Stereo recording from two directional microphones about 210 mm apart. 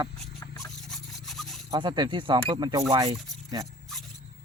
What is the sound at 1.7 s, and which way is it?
Speech, 20° right (ahead or behind).